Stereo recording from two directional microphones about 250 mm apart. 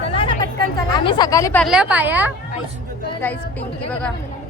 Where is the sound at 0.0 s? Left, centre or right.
Left.